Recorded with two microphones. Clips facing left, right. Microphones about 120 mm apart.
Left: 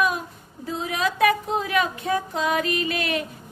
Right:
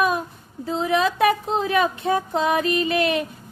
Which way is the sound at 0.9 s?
25° right (ahead or behind).